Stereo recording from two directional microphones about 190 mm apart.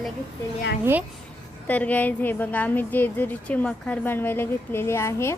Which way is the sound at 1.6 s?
10° left (ahead or behind).